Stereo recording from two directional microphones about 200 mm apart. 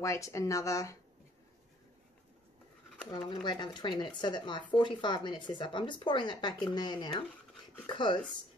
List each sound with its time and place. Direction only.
0.0 s speech: 15° left (ahead or behind)
3.1 s speech: 20° left (ahead or behind)